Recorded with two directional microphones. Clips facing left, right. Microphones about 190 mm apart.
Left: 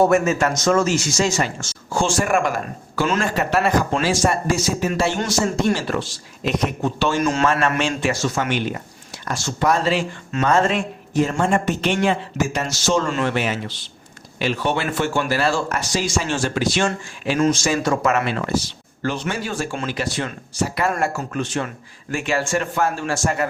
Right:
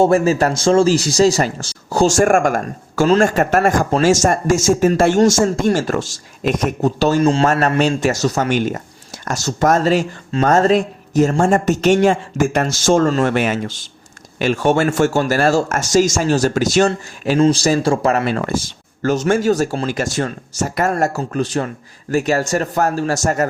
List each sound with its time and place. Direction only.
0.0 s speech: 30° right (ahead or behind)